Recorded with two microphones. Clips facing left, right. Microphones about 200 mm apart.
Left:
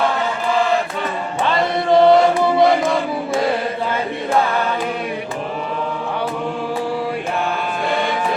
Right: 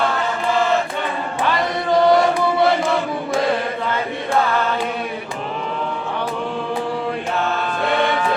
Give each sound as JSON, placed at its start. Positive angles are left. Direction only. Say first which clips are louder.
{"t": 1.5, "sound": "chant", "louder": "left 5 dB", "side_deg": 25}